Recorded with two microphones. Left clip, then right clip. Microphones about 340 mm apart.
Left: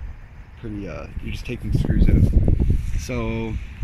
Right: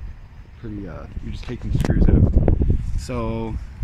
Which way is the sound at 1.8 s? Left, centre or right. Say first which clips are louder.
Right 3 dB; right.